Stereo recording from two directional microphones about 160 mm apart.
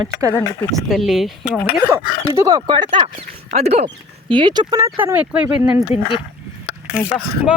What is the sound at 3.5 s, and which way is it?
Speech, 45° right (ahead or behind).